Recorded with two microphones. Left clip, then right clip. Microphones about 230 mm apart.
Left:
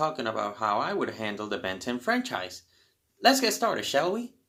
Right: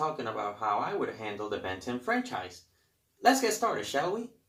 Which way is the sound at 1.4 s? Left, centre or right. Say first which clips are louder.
Left 3 dB; left.